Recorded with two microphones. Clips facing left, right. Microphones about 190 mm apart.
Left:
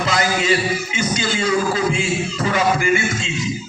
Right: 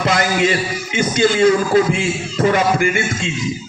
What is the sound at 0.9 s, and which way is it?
Speech, 55° right (ahead or behind).